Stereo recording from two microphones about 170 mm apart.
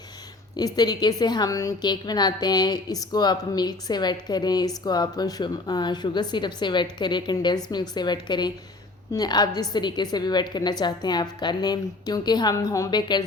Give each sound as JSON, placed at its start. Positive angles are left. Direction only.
{"t": 0.5, "sound": "a woman's voice", "side_deg": 25}